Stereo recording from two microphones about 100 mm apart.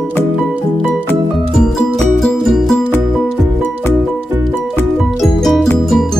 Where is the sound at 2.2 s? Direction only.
5° left (ahead or behind).